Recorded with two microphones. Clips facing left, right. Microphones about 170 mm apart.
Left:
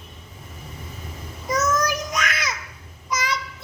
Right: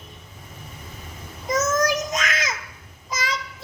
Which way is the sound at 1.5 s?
20° right (ahead or behind).